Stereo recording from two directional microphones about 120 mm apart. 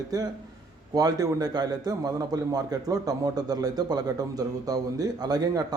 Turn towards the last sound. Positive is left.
turn(degrees=-30)  # may be behind; listen again after turning